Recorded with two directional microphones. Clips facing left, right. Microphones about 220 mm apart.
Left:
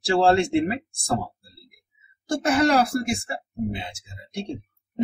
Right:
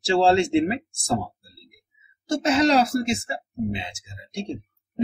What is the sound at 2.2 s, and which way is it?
Speech, 25° right (ahead or behind).